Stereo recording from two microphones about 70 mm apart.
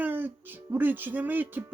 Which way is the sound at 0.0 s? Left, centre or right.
Right.